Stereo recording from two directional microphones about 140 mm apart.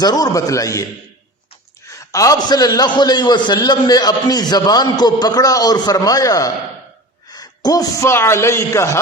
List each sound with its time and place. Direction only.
0.0 s a man's voice: 30° left (ahead or behind)
1.9 s a man's voice: 25° left (ahead or behind)